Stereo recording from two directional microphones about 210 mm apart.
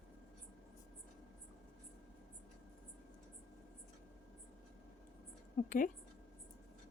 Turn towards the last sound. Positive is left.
turn(degrees=40)  # may be behind; listen again after turning